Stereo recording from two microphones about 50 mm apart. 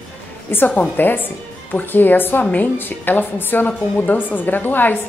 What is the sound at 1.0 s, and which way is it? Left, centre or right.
A woman's voice, left.